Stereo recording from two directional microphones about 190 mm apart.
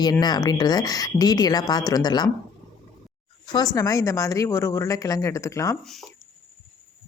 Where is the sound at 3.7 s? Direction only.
15° left (ahead or behind).